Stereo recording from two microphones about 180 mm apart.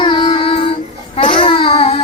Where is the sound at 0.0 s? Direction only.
30° left (ahead or behind).